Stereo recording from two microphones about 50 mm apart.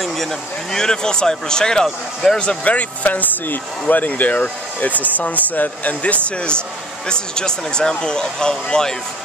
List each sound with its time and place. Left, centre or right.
0.0 s speech: centre
2.6 s speech: left